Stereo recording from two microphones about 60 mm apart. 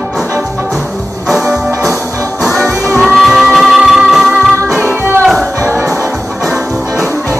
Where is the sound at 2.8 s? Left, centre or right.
Centre.